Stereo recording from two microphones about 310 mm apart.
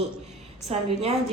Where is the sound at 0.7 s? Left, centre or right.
Right.